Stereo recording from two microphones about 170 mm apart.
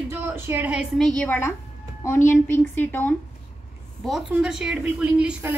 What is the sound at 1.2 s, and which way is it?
A woman's voice, 10° left (ahead or behind).